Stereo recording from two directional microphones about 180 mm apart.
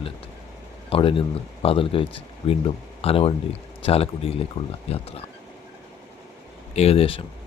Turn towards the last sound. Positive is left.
turn(degrees=30)  # may be behind; listen again after turning